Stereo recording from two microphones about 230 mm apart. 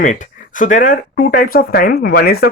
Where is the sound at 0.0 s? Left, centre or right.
Left.